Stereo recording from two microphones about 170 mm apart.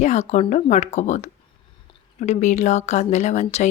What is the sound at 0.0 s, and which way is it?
Speech, 40° left (ahead or behind).